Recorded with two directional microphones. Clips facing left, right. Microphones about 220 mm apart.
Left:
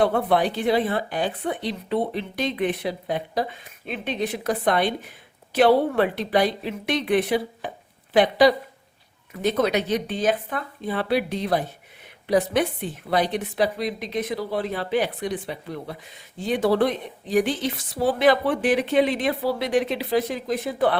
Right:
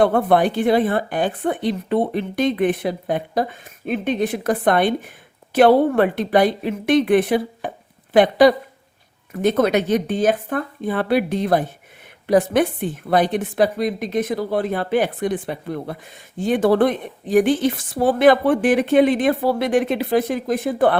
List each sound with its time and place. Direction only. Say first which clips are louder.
0.0 s a woman's voice: right 4 dB; 50° right (ahead or behind)